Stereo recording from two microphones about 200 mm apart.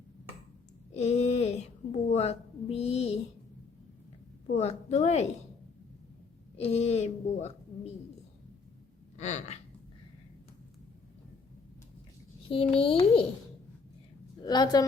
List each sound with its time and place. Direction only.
0.9 s a woman's voice: 30° left (ahead or behind)
4.5 s a woman's voice: 35° left (ahead or behind)
6.6 s a woman's voice: 30° left (ahead or behind)
9.1 s speech: 35° left (ahead or behind)
12.5 s a child's voice: 25° left (ahead or behind)
14.4 s a child's voice: 20° left (ahead or behind)